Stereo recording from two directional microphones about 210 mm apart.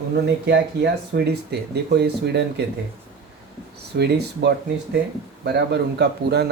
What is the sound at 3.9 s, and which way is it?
Speech, 50° right (ahead or behind).